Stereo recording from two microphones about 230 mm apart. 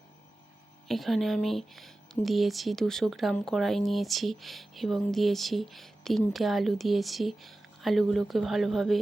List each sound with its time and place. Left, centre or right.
0.9 s speech: centre